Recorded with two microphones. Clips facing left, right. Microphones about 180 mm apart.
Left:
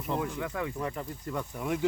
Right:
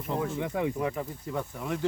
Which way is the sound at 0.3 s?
20° right (ahead or behind).